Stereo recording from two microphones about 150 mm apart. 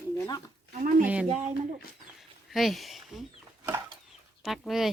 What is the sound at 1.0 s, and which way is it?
Speech, 10° right (ahead or behind).